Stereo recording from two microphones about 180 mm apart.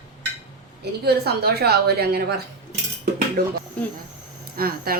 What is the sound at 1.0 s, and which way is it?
A woman's voice, 60° right (ahead or behind).